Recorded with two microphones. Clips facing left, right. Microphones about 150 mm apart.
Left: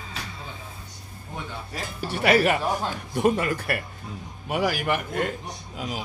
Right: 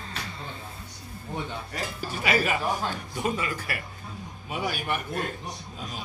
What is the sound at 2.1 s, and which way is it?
Speech, 70° left (ahead or behind).